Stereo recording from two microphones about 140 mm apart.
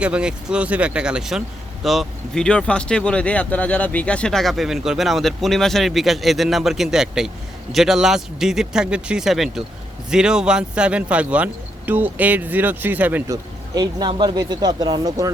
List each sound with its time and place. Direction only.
0.0 s speech: 5° right (ahead or behind)
13.3 s speech: 30° right (ahead or behind)